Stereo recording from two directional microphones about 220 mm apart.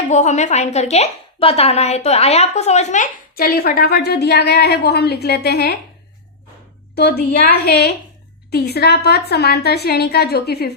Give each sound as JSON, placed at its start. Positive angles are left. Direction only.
{"t": 0.1, "sound": "a woman's voice", "side_deg": 30}
{"t": 6.9, "sound": "a woman's voice", "side_deg": 45}